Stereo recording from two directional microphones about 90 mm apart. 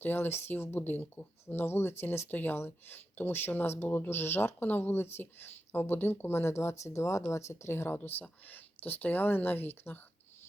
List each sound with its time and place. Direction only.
0.0 s speech: 25° left (ahead or behind)